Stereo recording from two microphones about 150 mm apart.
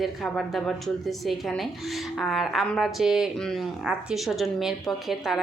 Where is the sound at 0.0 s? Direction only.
Centre (ahead or behind).